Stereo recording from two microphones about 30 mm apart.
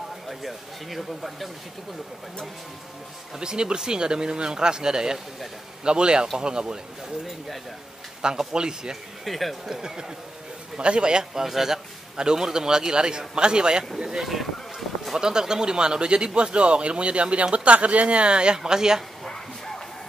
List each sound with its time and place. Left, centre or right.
0.3 s speech: centre
3.3 s speech: right
8.2 s speech: right
9.2 s speech: centre
9.7 s speech: right
10.8 s speech: right
11.3 s speech: centre
12.2 s speech: right
14.2 s a sound: centre
15.1 s speech: right
18.6 s speech: right
19.2 s a sound: centre